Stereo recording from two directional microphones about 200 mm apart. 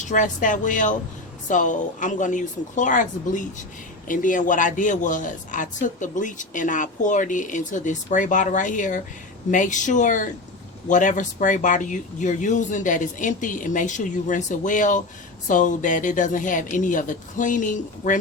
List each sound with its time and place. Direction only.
0.0 s a woman's voice: 40° left (ahead or behind)